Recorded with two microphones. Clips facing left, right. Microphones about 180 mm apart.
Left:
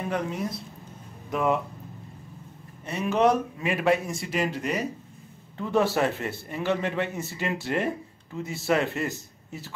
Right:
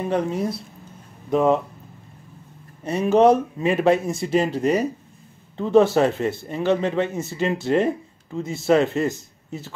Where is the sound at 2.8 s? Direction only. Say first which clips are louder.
Right 7 dB; 35° right (ahead or behind).